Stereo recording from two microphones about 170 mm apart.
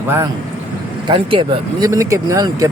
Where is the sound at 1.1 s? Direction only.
30° right (ahead or behind).